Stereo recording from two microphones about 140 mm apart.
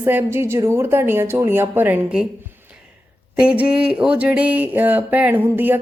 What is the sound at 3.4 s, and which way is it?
A woman's voice, 5° right (ahead or behind).